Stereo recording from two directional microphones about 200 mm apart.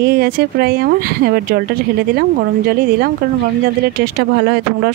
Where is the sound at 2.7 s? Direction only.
50° right (ahead or behind).